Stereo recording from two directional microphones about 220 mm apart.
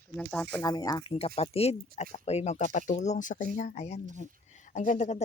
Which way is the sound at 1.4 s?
30° left (ahead or behind).